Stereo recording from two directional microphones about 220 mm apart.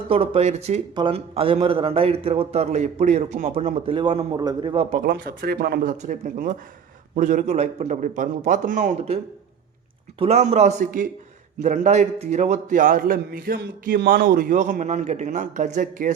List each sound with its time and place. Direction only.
0.1 s a man's voice: 25° right (ahead or behind)